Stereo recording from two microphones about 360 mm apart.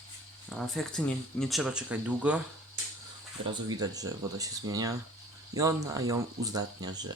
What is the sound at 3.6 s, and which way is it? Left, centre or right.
Speech, centre.